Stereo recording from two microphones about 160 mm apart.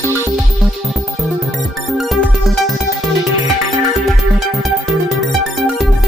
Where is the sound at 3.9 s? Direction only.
Centre (ahead or behind).